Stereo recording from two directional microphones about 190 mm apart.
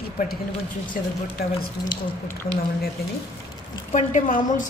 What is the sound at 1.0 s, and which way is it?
Speech, 50° left (ahead or behind).